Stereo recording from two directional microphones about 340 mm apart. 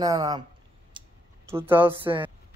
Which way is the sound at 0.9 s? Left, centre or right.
Centre.